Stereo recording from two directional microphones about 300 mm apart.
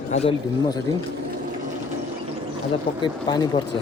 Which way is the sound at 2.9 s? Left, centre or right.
Centre.